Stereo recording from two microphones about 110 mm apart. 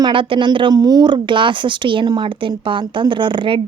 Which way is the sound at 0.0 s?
50° right (ahead or behind).